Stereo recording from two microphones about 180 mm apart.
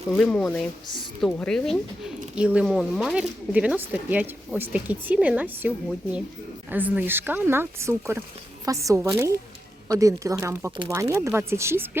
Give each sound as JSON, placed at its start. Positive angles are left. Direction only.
{"t": 0.1, "sound": "speech", "side_deg": 5}